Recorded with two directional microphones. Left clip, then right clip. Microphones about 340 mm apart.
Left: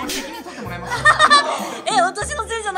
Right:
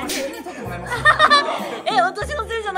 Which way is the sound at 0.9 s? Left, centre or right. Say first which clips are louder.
Left 1 dB; centre.